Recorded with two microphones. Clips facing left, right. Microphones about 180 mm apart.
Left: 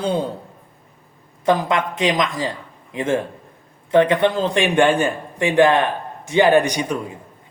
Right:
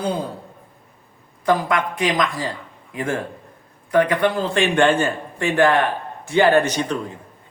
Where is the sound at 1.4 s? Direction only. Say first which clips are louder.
Left 1 dB; 20° left (ahead or behind).